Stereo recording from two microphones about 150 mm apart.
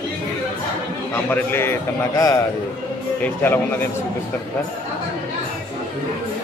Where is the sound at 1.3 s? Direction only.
15° left (ahead or behind).